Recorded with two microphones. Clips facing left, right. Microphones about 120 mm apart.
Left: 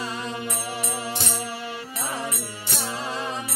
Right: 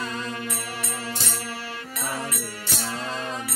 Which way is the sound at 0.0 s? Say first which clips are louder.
Left 1 dB; 20° left (ahead or behind).